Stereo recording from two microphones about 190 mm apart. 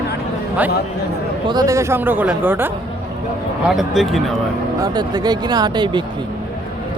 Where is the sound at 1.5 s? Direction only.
20° right (ahead or behind); by 4.2 s centre (ahead or behind).